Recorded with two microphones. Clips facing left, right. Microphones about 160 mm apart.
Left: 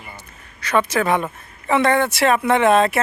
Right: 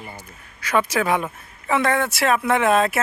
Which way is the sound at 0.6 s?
10° right (ahead or behind).